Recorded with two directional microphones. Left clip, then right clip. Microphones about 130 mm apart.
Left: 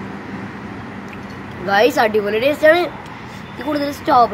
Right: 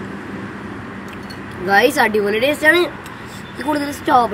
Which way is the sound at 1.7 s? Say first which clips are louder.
Even; 10° left (ahead or behind).